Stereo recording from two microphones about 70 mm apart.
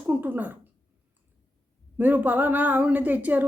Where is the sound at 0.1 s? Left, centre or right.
Right.